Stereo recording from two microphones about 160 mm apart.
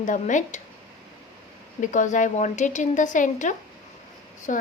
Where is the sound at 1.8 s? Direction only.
50° left (ahead or behind).